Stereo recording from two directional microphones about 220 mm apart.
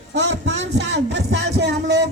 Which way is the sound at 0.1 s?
50° right (ahead or behind).